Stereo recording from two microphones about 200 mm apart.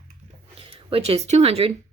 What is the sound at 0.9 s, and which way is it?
Speech, 30° right (ahead or behind).